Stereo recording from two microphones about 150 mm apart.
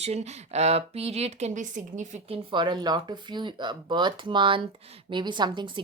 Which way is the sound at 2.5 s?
30° right (ahead or behind).